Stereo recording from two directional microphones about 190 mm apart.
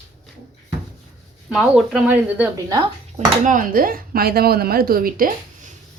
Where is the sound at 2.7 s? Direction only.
20° right (ahead or behind).